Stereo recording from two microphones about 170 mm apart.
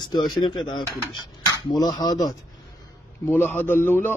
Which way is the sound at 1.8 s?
25° left (ahead or behind).